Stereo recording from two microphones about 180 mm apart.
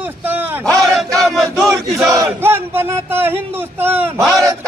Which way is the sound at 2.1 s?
15° right (ahead or behind).